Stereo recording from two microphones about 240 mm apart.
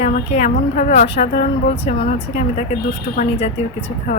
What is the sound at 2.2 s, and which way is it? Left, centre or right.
Speech, left.